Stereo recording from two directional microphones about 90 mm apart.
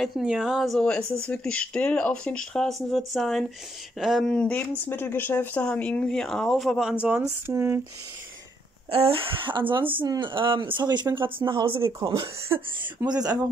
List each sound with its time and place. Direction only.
0.0 s a woman's voice: 5° right (ahead or behind)
1.2 s a woman's voice: 15° left (ahead or behind)
4.3 s speech: 15° left (ahead or behind)
6.8 s speech: 10° right (ahead or behind)
7.4 s speech: 30° right (ahead or behind)
8.9 s speech: 90° right; by 11.8 s 70° right (ahead or behind)
12.4 s speech: 25° right (ahead or behind)
13.1 s speech: 45° right (ahead or behind)